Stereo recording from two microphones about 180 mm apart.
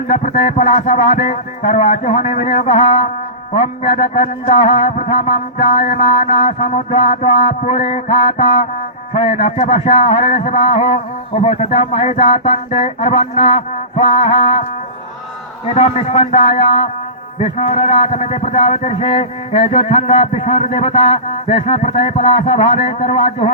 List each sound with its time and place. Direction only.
0.1 s a man's voice: 35° left (ahead or behind)
15.6 s a man's voice: 35° left (ahead or behind)